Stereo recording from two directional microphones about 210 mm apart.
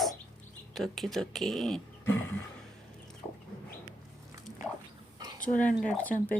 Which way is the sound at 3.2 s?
20° left (ahead or behind).